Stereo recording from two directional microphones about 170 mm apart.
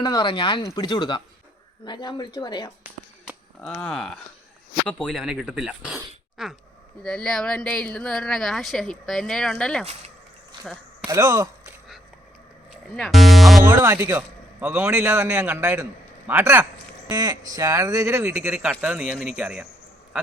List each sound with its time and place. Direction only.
0.0 s speech: 25° left (ahead or behind)
3.7 s speech: 5° left (ahead or behind)
11.0 s speech: 15° right (ahead or behind)
12.7 s speech: centre (ahead or behind)
13.6 s a man's voice: 20° right (ahead or behind)
17.1 s a man's voice: 25° right (ahead or behind); by 19.6 s 5° right (ahead or behind)